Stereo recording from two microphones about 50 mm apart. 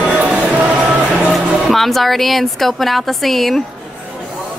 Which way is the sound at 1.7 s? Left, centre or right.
Centre.